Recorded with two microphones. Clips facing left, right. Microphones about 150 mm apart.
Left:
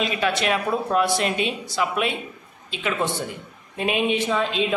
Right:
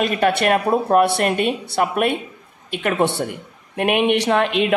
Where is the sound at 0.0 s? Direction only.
55° right (ahead or behind).